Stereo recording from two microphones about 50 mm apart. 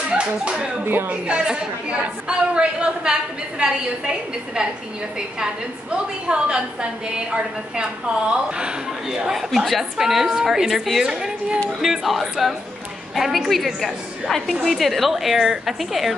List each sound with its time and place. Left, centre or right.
0.1 s a woman's voice: right
9.7 s a woman's voice: centre
11.8 s a woman's voice: centre